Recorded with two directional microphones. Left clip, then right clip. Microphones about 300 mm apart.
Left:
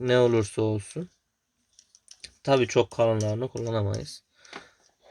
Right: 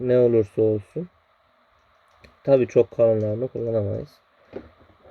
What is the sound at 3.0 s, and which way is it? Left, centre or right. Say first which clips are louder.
Speech: right 5 dB; centre.